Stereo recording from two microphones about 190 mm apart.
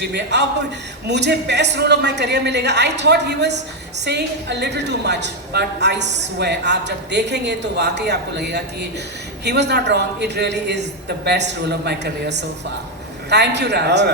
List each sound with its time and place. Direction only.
0.0 s a woman's voice: 60° right (ahead or behind)